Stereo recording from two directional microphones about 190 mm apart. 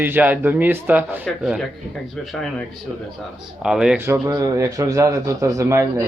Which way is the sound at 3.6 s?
5° right (ahead or behind).